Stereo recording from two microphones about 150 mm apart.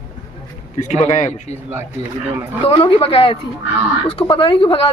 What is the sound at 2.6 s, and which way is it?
Speech, 35° left (ahead or behind).